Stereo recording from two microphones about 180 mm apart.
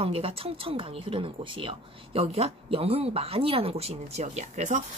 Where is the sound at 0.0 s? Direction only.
30° right (ahead or behind).